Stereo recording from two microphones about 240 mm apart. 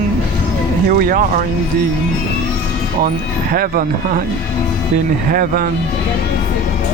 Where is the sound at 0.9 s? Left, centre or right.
Right.